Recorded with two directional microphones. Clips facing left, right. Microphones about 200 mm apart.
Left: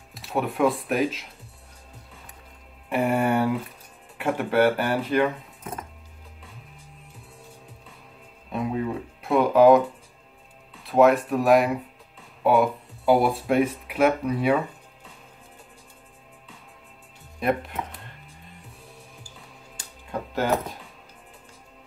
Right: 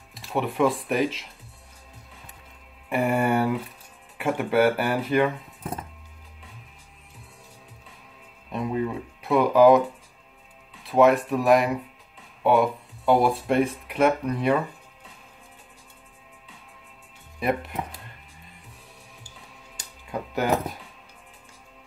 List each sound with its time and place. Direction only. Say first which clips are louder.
0.1 s speech: even; centre (ahead or behind)
2.9 s speech: even; centre (ahead or behind)
8.5 s music: even; centre (ahead or behind)
10.8 s speech: even; centre (ahead or behind)
17.4 s speech: left 1 dB; centre (ahead or behind)